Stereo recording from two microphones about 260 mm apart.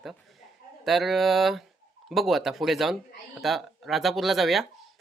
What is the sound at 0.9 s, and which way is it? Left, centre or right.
Speech, centre.